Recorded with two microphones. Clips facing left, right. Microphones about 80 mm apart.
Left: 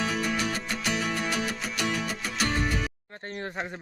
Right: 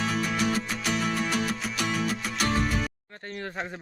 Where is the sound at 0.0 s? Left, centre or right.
Centre.